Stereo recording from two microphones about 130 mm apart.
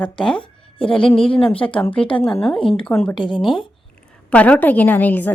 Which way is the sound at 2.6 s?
40° left (ahead or behind).